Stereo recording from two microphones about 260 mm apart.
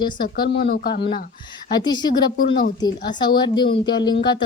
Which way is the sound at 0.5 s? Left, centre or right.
Left.